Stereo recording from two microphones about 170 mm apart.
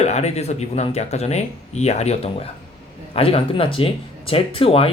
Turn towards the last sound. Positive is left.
turn(degrees=35)  # may be behind; listen again after turning